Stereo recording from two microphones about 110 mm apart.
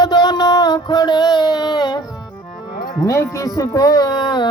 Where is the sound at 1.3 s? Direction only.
35° left (ahead or behind).